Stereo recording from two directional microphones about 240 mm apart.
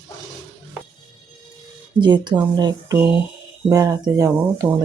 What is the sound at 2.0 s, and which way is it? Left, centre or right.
Speech, centre.